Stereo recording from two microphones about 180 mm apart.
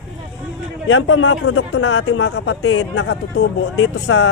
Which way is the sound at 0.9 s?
90° left.